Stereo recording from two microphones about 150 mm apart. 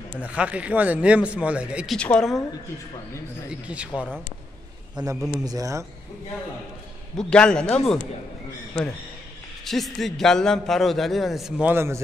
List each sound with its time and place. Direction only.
0.2 s a man's voice: 10° right (ahead or behind)
2.0 s a man's voice: 5° left (ahead or behind)
3.4 s a man's voice: 10° right (ahead or behind)
5.0 s speech: 30° right (ahead or behind)
7.2 s a man's voice: 5° left (ahead or behind)
9.7 s a man's voice: centre (ahead or behind)
11.6 s a man's voice: 15° right (ahead or behind)